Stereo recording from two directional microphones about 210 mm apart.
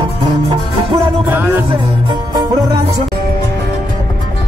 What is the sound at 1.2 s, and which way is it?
Speech, 10° right (ahead or behind).